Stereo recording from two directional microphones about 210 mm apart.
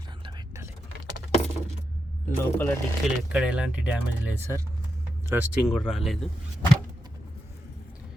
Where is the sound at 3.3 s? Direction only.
5° right (ahead or behind).